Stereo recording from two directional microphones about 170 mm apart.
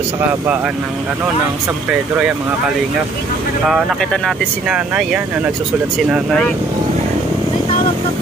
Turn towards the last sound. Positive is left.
turn(degrees=-5)  # may be behind; listen again after turning